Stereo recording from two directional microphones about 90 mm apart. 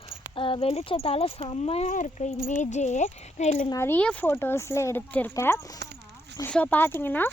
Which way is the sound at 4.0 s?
15° left (ahead or behind).